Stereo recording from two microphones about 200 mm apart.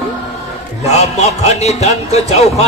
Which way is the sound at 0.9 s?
35° left (ahead or behind).